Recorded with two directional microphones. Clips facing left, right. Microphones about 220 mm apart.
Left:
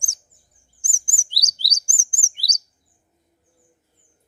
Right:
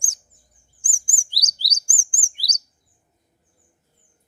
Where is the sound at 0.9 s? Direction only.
25° left (ahead or behind).